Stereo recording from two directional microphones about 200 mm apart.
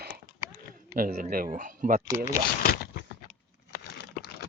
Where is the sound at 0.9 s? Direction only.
45° right (ahead or behind).